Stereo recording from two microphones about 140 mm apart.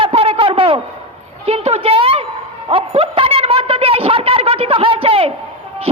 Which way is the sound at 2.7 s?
40° right (ahead or behind).